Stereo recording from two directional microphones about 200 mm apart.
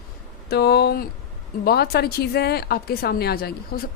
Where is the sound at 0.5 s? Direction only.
55° left (ahead or behind).